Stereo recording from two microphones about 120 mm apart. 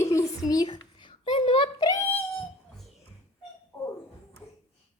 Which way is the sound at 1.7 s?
30° left (ahead or behind).